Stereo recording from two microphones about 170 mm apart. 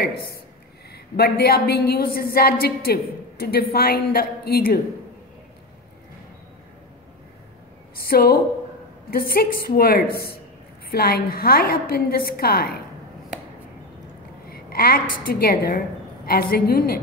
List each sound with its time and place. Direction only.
0.9 s a woman's voice: 65° left (ahead or behind)
7.9 s a woman's voice: 60° left (ahead or behind)
14.5 s a woman's voice: 65° left (ahead or behind)